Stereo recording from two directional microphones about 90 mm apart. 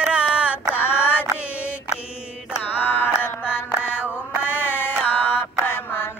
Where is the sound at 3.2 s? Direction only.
25° left (ahead or behind).